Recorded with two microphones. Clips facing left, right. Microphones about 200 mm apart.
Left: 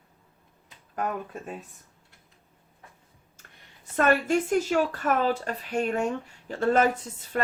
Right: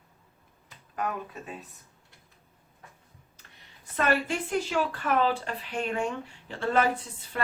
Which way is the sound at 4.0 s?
45° left (ahead or behind).